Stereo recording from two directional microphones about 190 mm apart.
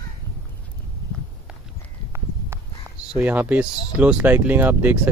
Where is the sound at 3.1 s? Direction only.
10° right (ahead or behind).